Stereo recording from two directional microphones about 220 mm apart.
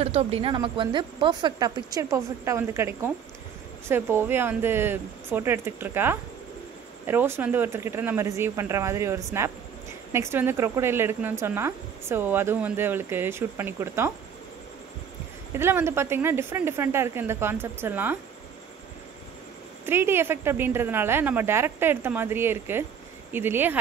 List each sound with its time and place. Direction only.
0.0 s speech: 25° right (ahead or behind); by 14.1 s 10° right (ahead or behind)
15.5 s speech: 10° right (ahead or behind)
19.9 s speech: 10° right (ahead or behind)